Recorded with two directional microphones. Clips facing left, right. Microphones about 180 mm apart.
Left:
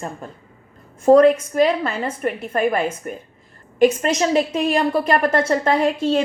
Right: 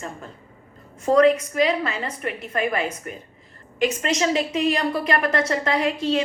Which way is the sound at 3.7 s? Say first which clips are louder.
Left 6 dB; 55° left (ahead or behind).